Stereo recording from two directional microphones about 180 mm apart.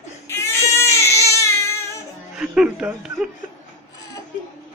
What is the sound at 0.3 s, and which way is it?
Baby cry, 15° left (ahead or behind).